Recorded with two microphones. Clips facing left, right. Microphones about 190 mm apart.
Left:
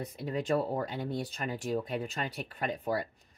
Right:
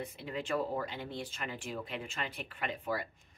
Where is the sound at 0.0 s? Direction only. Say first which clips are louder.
Left 5 dB; 40° left (ahead or behind).